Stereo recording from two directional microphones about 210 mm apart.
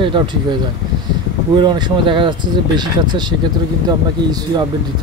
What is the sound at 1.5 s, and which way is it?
Speech, 20° right (ahead or behind).